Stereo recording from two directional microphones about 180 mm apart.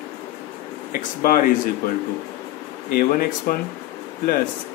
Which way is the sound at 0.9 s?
50° left (ahead or behind).